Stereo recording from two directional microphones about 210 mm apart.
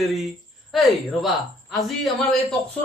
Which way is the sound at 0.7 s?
Centre (ahead or behind).